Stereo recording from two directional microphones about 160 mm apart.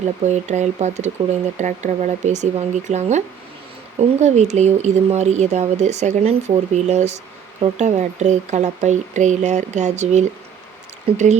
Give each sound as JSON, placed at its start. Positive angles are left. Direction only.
{"t": 0.3, "sound": "speech", "side_deg": -45}